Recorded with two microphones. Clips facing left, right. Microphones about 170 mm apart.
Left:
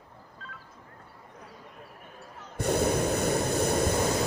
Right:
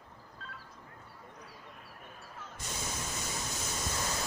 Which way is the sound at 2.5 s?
60° left (ahead or behind).